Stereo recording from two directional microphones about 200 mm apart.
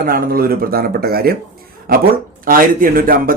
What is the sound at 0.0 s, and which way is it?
Speech, 45° right (ahead or behind).